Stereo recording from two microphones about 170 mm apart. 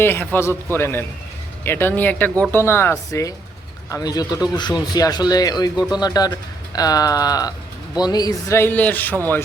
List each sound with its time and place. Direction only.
0.0 s speech: 10° left (ahead or behind)